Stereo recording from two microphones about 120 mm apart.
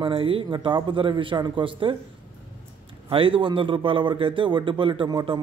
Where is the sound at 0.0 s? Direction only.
45° right (ahead or behind).